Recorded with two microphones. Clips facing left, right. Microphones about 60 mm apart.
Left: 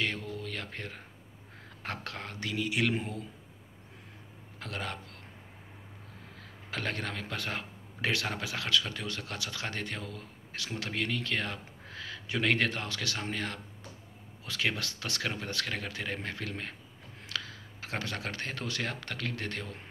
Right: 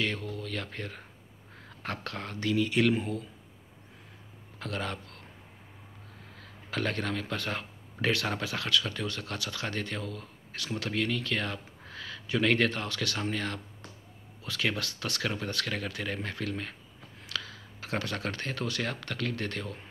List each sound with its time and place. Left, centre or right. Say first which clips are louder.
0.0 s speech: right 1 dB; left
4.6 s speech: right 3 dB; left
6.7 s speech: right 4 dB; left